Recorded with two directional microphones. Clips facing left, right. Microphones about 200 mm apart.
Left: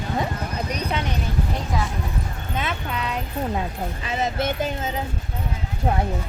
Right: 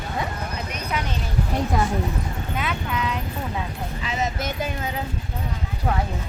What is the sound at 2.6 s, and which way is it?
Vehicle, 30° left (ahead or behind).